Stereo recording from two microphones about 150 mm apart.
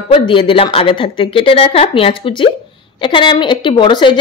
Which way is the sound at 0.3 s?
35° left (ahead or behind).